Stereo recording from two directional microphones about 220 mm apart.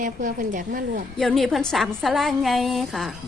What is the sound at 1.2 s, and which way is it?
A woman's voice, centre (ahead or behind).